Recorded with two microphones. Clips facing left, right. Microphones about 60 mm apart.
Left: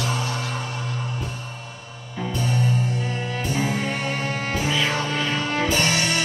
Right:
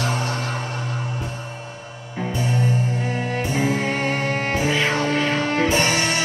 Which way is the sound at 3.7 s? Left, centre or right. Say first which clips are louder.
Right 3 dB; right.